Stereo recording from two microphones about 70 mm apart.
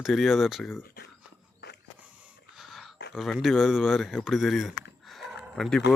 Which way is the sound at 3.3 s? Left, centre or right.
Centre.